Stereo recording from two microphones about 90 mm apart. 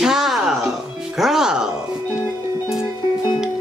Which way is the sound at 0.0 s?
5° right (ahead or behind).